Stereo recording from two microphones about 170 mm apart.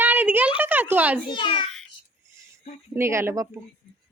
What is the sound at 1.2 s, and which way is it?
Speech, 30° left (ahead or behind).